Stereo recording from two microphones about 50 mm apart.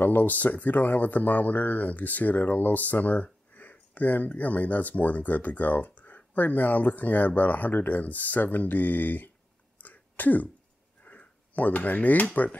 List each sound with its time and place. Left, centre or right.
0.0 s speech: left
9.8 s throat clearing: left
11.1 s a sound: left